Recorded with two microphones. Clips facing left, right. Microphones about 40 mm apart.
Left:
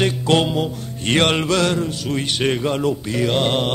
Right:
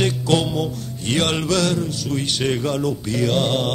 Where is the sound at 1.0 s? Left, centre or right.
Left.